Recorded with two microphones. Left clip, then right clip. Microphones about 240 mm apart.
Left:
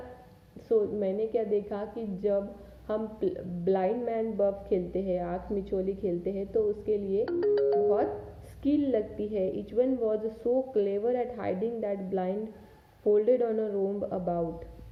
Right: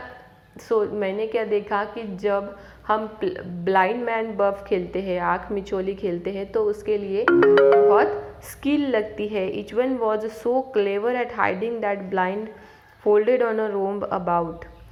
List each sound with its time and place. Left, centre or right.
0.7 s a woman's voice: centre
7.3 s speech: right
8.6 s a woman's voice: centre